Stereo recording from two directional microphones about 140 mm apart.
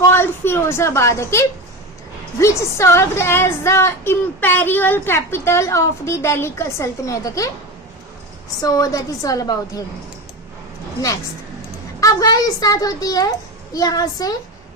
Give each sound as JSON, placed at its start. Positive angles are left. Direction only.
{"t": 0.1, "sound": "a woman's voice", "side_deg": 15}
{"t": 8.6, "sound": "a woman's voice", "side_deg": 25}
{"t": 11.9, "sound": "a woman's voice", "side_deg": 25}